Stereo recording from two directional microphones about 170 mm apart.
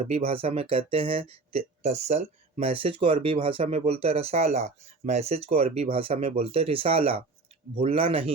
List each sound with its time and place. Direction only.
0.0 s speech: 35° right (ahead or behind)